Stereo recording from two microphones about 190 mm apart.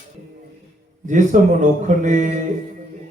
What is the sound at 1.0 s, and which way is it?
Mantra, 40° right (ahead or behind).